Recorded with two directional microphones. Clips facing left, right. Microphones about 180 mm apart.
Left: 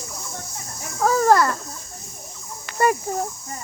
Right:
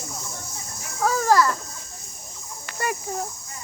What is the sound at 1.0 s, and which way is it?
Speech, 45° left (ahead or behind).